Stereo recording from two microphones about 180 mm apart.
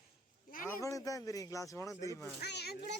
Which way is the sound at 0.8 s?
20° left (ahead or behind).